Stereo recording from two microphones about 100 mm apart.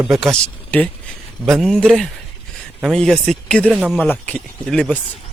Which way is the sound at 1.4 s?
Centre (ahead or behind).